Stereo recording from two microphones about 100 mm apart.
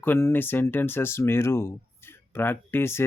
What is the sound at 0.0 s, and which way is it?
Mantra, 25° left (ahead or behind).